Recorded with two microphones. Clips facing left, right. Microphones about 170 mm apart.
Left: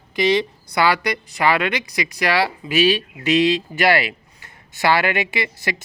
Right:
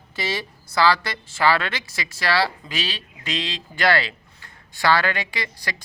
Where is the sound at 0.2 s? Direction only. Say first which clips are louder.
Left 10 dB; 20° left (ahead or behind).